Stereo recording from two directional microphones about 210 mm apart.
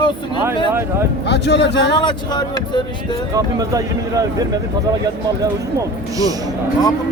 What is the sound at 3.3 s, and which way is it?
Speech, 15° right (ahead or behind).